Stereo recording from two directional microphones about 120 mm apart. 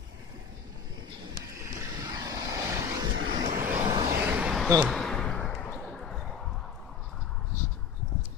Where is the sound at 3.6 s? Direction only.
15° right (ahead or behind).